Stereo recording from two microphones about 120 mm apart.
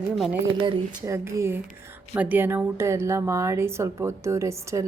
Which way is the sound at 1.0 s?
25° right (ahead or behind).